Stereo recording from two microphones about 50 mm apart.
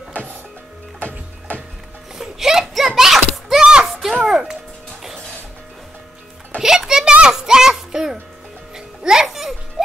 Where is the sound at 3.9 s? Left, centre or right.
Centre.